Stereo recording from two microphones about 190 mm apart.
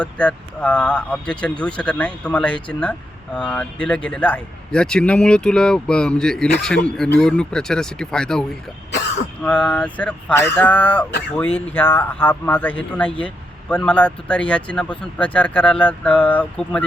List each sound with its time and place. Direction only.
0.0 s a man's voice: 5° left (ahead or behind)